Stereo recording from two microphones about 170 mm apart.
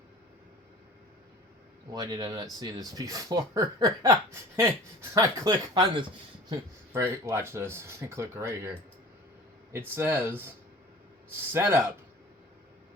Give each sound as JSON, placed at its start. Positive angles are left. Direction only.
{"t": 1.9, "sound": "speech", "side_deg": -20}
{"t": 6.5, "sound": "speech", "side_deg": -15}
{"t": 9.7, "sound": "speech", "side_deg": -10}